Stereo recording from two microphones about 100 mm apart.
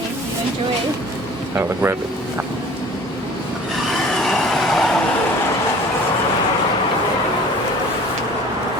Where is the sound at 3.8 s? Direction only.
Centre (ahead or behind).